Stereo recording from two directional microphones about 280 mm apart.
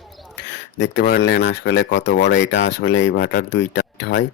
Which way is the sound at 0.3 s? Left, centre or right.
Left.